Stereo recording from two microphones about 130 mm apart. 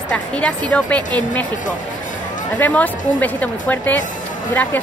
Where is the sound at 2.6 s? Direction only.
10° left (ahead or behind).